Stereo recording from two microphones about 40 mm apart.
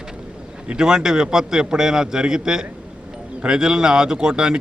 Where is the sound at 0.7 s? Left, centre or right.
Centre.